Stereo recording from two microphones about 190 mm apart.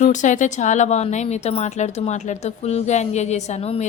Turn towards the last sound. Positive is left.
turn(degrees=35)  # may be behind; listen again after turning